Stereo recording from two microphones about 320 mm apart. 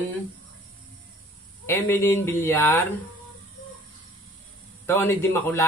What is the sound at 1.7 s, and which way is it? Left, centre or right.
Speech, centre.